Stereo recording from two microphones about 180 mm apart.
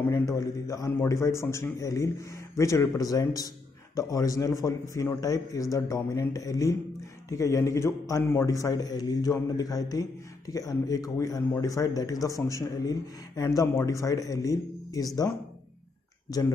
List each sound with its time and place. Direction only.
0.1 s a man's voice: 20° left (ahead or behind)